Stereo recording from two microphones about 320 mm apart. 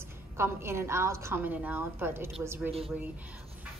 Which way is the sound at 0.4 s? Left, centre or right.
Centre.